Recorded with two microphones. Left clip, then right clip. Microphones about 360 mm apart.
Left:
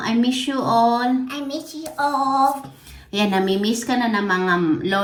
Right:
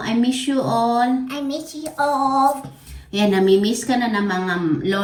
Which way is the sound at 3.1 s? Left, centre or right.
Left.